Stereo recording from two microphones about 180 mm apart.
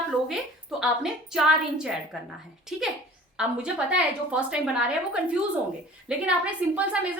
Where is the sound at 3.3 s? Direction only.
5° right (ahead or behind).